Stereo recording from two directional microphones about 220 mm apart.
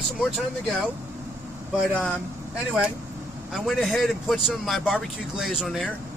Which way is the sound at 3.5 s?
Centre (ahead or behind).